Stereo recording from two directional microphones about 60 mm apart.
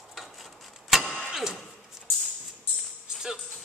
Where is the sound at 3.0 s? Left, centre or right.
Centre.